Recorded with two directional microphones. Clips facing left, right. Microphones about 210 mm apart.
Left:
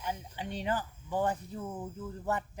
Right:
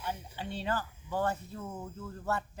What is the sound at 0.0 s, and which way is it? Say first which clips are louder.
Speech: left 1 dB; 10° left (ahead or behind).